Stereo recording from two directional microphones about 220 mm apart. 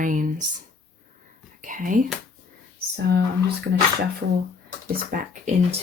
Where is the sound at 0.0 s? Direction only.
35° right (ahead or behind).